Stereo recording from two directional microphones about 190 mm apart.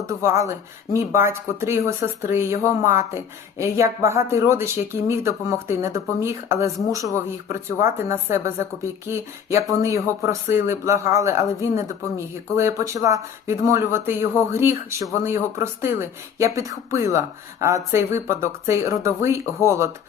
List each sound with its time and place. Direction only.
0.1 s speech: 15° right (ahead or behind)